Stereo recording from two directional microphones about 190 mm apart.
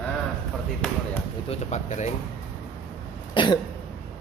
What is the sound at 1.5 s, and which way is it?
Speech, 35° left (ahead or behind).